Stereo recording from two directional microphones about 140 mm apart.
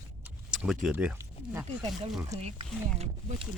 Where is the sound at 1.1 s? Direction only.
20° right (ahead or behind).